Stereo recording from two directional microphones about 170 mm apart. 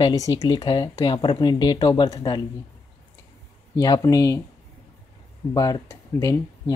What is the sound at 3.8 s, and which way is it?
Speech, 20° left (ahead or behind).